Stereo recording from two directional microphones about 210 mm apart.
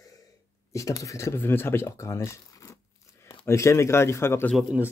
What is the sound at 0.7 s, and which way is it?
Speech, 15° left (ahead or behind).